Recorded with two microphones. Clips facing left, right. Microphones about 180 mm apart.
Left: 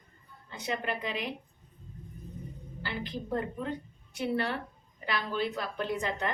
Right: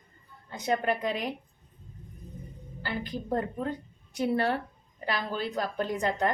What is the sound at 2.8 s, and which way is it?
A woman's voice, 45° right (ahead or behind).